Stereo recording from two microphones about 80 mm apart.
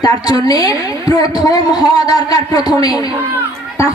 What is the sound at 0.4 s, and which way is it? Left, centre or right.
A woman's voice, left.